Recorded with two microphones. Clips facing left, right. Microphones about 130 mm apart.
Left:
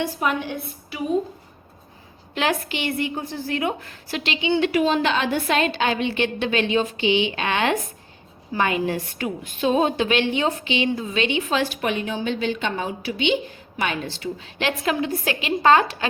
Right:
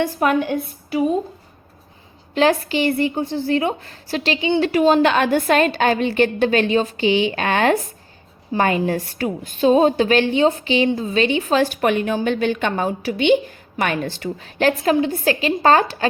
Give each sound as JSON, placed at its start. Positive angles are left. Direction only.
{"t": 0.0, "sound": "a woman's voice", "side_deg": -50}
{"t": 2.3, "sound": "a woman's voice", "side_deg": -35}
{"t": 5.0, "sound": "a woman's voice", "side_deg": -55}
{"t": 15.0, "sound": "a woman's voice", "side_deg": -35}